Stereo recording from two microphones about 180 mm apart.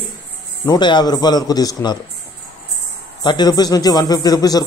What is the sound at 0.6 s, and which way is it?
A man's voice, 25° left (ahead or behind).